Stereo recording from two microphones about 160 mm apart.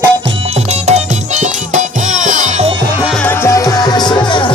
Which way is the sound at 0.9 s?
45° right (ahead or behind).